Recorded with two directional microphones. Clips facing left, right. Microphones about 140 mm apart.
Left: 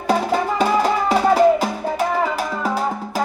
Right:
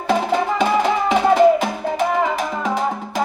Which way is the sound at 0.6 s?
40° left (ahead or behind).